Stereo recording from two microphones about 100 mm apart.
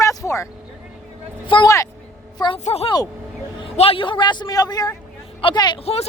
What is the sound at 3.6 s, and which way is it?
A woman's voice, 70° left (ahead or behind).